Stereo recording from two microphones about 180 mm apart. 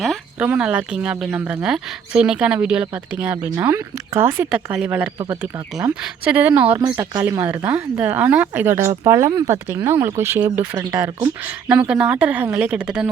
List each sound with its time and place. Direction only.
0.0 s speech: 5° right (ahead or behind)